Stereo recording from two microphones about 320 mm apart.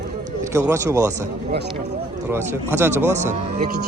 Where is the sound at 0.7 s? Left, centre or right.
Centre.